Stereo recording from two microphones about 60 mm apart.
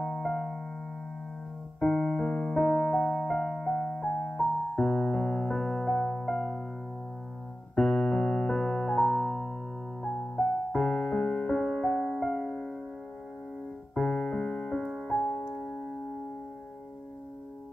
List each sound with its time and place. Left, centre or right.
0.0 s music: centre
1.9 s music: centre
7.7 s keyboard: centre
10.2 s music: centre
10.7 s music: centre
13.9 s music: left
14.8 s music: centre